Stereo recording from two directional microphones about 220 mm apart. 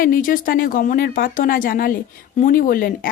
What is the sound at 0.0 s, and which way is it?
Speech, 40° left (ahead or behind).